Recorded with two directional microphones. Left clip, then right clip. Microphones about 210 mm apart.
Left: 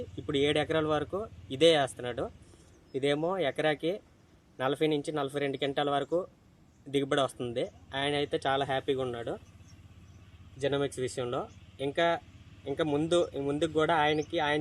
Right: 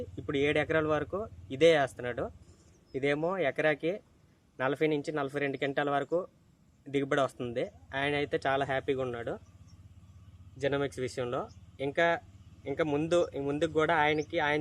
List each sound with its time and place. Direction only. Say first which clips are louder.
0.2 s speech: left 1 dB; 10° left (ahead or behind)
10.6 s speech: left 1 dB; 10° left (ahead or behind)